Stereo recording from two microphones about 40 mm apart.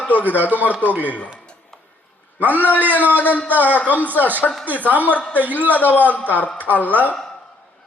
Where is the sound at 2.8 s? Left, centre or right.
Right.